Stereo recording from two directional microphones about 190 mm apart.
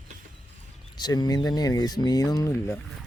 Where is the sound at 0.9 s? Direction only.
20° left (ahead or behind).